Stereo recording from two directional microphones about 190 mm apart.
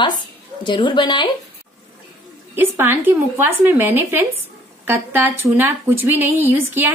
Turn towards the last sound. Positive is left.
turn(degrees=-10)  # may be behind; listen again after turning